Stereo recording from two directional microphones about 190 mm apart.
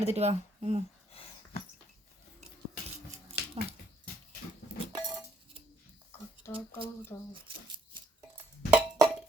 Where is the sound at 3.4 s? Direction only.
55° left (ahead or behind).